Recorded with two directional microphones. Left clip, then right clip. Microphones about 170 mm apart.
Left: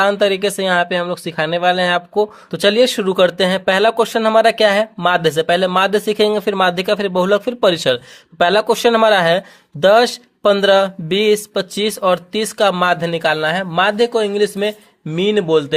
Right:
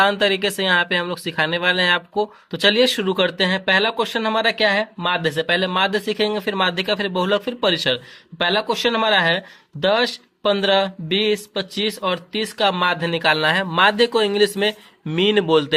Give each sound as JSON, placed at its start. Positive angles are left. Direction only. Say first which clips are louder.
{"t": 0.0, "sound": "speech", "louder": "left 3 dB", "side_deg": 30}